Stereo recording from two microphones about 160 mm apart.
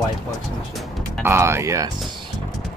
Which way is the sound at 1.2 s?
15° right (ahead or behind).